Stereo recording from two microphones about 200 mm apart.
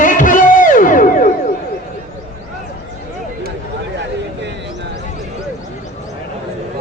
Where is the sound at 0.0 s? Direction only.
40° left (ahead or behind).